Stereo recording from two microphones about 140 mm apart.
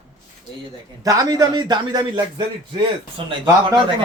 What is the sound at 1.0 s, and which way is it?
A man's voice, 25° right (ahead or behind).